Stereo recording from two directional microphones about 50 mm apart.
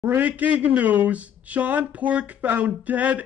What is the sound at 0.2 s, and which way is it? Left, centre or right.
Speech, right.